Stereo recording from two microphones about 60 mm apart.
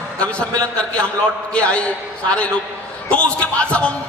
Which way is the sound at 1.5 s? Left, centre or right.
Left.